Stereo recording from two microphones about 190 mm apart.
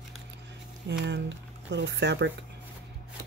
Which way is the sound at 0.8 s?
70° right (ahead or behind).